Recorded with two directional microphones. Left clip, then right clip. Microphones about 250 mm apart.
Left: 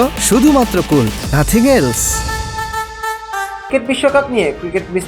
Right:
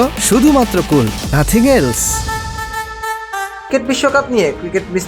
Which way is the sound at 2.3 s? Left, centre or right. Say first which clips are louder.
Left 1 dB; left.